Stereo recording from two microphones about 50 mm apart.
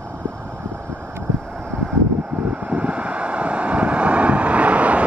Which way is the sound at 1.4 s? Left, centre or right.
Centre.